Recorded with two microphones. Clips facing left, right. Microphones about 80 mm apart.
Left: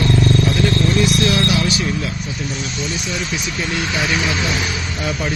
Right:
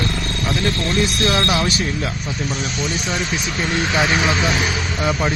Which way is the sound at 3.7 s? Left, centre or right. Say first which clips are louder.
Right 3 dB; right.